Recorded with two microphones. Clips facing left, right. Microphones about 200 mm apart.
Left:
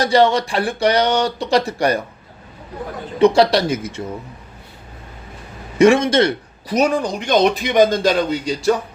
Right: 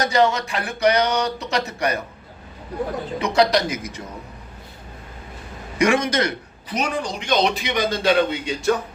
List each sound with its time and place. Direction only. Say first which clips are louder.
0.0 s speech: left 4 dB; 30° left (ahead or behind)
3.2 s speech: left 6 dB; 30° left (ahead or behind)
5.8 s a man's voice: left 7 dB; 25° left (ahead or behind)
6.7 s a man's voice: left 7 dB; 50° left (ahead or behind)